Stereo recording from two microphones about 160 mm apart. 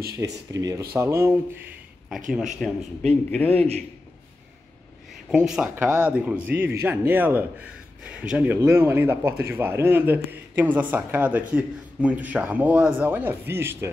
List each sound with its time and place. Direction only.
0.2 s speech: 20° right (ahead or behind)
2.3 s speech: centre (ahead or behind)
3.3 s a man's voice: 10° left (ahead or behind)
3.5 s a man's voice: 40° right (ahead or behind)
5.3 s speech: 5° right (ahead or behind)